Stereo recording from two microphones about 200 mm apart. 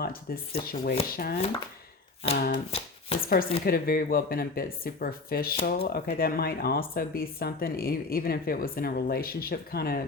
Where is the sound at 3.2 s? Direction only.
45° left (ahead or behind).